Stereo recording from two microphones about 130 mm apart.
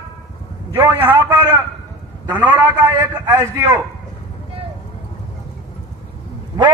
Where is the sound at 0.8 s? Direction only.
20° right (ahead or behind).